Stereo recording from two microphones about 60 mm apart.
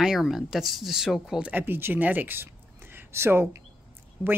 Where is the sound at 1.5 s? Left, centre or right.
Right.